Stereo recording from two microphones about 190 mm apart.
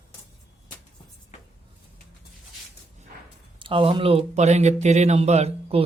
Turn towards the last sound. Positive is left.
turn(degrees=-35)  # may be behind; listen again after turning